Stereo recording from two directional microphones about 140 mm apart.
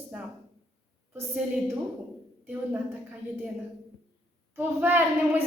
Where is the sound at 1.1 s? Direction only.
20° right (ahead or behind).